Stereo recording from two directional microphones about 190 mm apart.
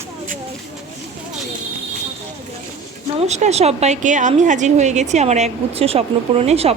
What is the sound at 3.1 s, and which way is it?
A woman's voice, 35° right (ahead or behind).